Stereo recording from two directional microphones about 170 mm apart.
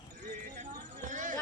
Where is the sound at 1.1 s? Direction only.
50° right (ahead or behind).